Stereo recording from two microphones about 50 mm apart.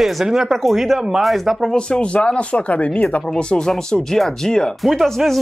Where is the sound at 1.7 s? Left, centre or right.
Centre.